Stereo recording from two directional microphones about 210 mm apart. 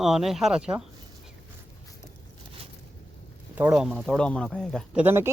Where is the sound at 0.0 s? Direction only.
Centre (ahead or behind).